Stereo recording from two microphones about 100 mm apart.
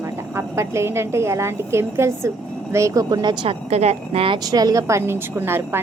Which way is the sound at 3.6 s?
90° right.